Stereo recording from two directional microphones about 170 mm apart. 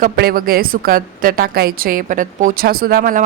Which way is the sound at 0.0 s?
60° right (ahead or behind).